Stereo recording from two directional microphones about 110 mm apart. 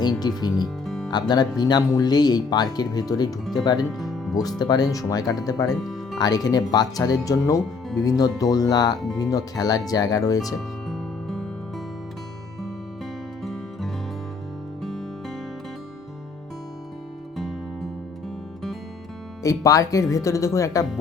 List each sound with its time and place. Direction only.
0.0 s speech: 40° left (ahead or behind)
0.9 s music: centre (ahead or behind)
1.1 s speech: 40° left (ahead or behind)
3.9 s music: centre (ahead or behind)
4.4 s speech: 35° left (ahead or behind)
5.8 s music: centre (ahead or behind)
6.1 s speech: 35° left (ahead or behind)
10.8 s music: centre (ahead or behind)
13.4 s music: centre (ahead or behind)
17.3 s music: centre (ahead or behind)
19.4 s speech: 30° left (ahead or behind)